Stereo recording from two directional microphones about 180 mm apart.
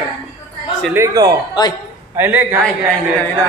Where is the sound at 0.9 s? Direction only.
15° right (ahead or behind).